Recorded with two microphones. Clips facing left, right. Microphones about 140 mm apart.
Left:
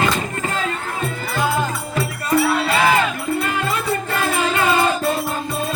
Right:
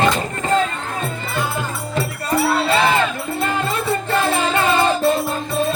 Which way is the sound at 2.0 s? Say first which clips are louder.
Left 1 dB; 30° right (ahead or behind).